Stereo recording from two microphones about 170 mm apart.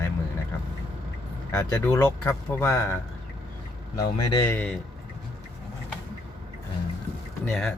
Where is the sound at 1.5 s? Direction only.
15° left (ahead or behind).